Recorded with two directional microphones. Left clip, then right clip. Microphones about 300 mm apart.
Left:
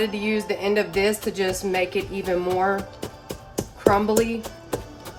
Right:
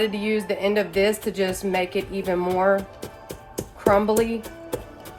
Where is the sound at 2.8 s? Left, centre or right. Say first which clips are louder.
Left 1 dB; centre.